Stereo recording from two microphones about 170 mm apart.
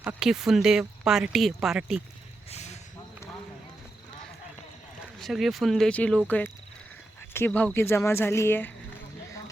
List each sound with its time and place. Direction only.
0.0 s speech: 5° right (ahead or behind)
2.5 s a sound: 40° left (ahead or behind)
5.2 s speech: centre (ahead or behind)